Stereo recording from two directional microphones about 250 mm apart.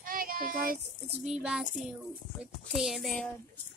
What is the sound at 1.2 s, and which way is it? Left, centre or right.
Speech, centre.